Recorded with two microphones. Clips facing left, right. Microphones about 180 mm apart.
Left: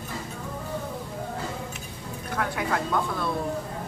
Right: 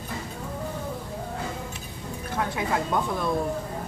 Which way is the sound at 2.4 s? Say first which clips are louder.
Right 1 dB; 25° right (ahead or behind).